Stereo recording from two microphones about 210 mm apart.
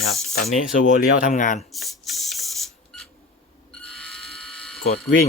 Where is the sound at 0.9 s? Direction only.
40° left (ahead or behind).